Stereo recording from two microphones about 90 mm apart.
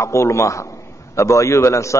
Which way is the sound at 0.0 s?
35° left (ahead or behind).